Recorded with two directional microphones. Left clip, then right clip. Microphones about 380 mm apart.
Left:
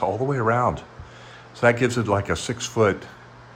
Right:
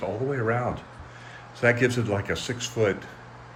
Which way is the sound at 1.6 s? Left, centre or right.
Centre.